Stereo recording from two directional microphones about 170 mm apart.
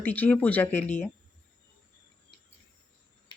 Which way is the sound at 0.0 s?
10° left (ahead or behind).